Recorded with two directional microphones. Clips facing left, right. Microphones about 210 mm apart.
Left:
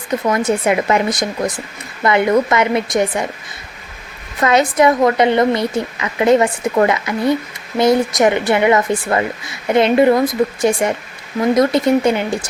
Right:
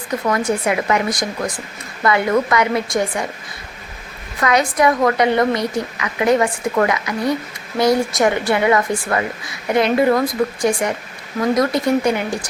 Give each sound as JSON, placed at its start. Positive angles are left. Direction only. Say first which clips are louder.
{"t": 0.1, "sound": "speech", "louder": "left 3 dB", "side_deg": 20}
{"t": 4.4, "sound": "speech", "louder": "left 3 dB", "side_deg": 25}